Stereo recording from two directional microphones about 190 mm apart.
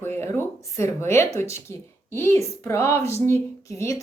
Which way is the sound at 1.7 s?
15° left (ahead or behind).